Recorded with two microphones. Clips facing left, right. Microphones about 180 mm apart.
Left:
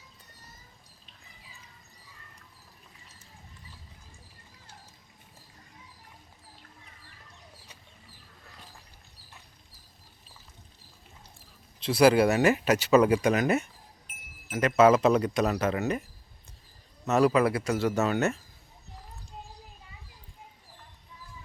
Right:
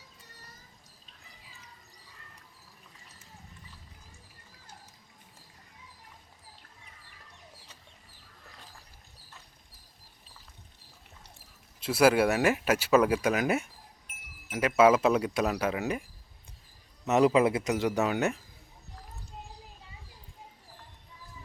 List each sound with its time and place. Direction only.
11.8 s speech: 5° right (ahead or behind)
17.1 s speech: 20° right (ahead or behind)